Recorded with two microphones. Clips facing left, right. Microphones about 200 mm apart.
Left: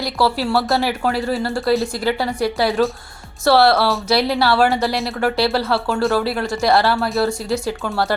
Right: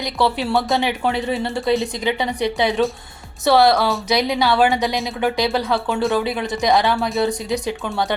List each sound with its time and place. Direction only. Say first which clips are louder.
0.0 s speech: left 1 dB; 5° left (ahead or behind)
3.4 s speech: left 1 dB; 15° right (ahead or behind)
4.2 s speech: even; 5° left (ahead or behind)
6.7 s speech: left 1 dB; 15° right (ahead or behind)
6.9 s speech: left 1 dB; centre (ahead or behind)